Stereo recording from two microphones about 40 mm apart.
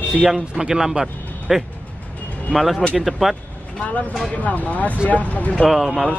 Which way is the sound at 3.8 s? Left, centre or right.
Left.